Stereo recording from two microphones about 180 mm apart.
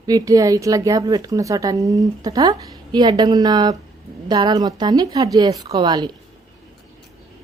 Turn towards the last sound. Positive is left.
turn(degrees=-20)  # may be behind; listen again after turning